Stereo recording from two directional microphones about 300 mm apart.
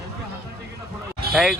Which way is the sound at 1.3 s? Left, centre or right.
Centre.